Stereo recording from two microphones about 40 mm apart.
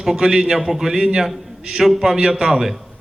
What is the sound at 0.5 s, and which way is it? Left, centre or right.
A man's voice, centre.